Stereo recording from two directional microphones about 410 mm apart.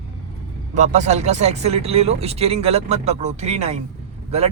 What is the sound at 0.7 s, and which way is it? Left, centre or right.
Speech, centre.